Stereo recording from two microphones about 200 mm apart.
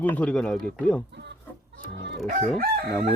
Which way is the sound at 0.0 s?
10° left (ahead or behind).